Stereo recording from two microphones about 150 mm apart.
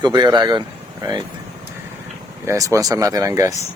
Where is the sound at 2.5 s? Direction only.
20° right (ahead or behind).